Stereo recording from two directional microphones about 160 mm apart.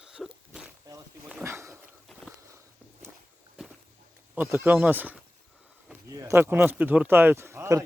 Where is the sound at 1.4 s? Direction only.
15° right (ahead or behind).